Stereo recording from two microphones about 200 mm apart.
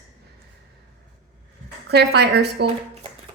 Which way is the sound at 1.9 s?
55° right (ahead or behind).